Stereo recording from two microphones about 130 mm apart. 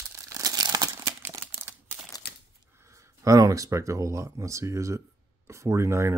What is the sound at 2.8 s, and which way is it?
Speech, 20° right (ahead or behind).